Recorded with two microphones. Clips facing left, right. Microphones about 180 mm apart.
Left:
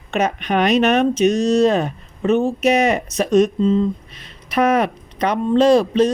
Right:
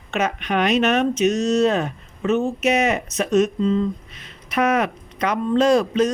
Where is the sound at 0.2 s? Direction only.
35° left (ahead or behind).